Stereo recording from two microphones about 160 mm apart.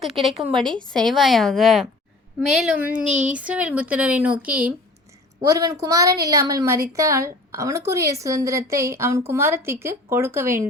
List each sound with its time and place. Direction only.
0.0 s a woman's voice: centre (ahead or behind)
5.4 s a woman's voice: 20° right (ahead or behind)